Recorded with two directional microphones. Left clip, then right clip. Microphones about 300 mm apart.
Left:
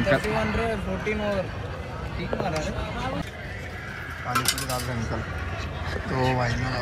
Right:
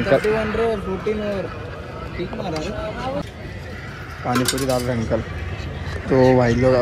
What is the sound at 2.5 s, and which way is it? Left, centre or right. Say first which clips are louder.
Speech: right 4 dB; left.